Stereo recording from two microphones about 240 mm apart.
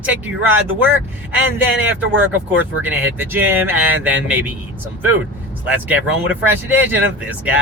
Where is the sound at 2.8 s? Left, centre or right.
Centre.